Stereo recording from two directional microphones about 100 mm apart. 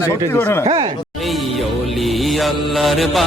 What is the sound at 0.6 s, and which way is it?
Speech, 75° right (ahead or behind).